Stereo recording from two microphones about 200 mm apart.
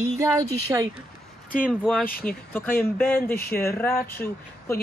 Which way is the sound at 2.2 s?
10° left (ahead or behind).